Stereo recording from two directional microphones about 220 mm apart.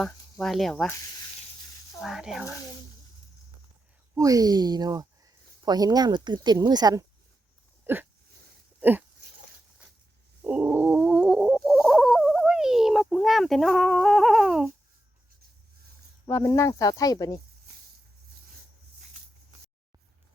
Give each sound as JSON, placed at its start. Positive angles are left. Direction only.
{"t": 0.0, "sound": "speech", "side_deg": 0}
{"t": 2.0, "sound": "speech", "side_deg": 0}
{"t": 2.6, "sound": "speech", "side_deg": 15}
{"t": 4.1, "sound": "speech", "side_deg": -15}
{"t": 7.9, "sound": "hiccup", "side_deg": -10}
{"t": 8.8, "sound": "speech", "side_deg": -10}
{"t": 10.4, "sound": "a sound", "side_deg": -5}
{"t": 16.2, "sound": "speech", "side_deg": 15}